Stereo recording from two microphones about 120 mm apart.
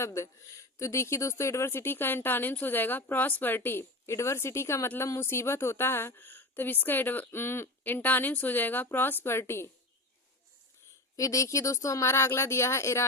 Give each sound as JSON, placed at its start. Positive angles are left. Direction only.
{"t": 0.0, "sound": "speech", "side_deg": 25}
{"t": 11.2, "sound": "speech", "side_deg": 25}